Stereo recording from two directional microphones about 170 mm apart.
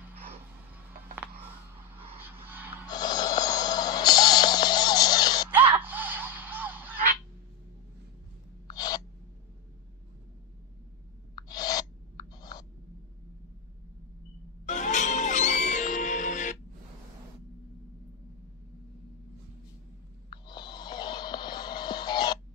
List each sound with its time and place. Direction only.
2.1 s vehicle: 10° right (ahead or behind)
2.9 s music: 25° left (ahead or behind)
5.8 s music: 10° right (ahead or behind)
8.6 s gasp: 25° left (ahead or behind)
11.3 s a sound: 25° left (ahead or behind)
14.7 s music: 45° left (ahead or behind)
20.2 s a sound: 25° left (ahead or behind)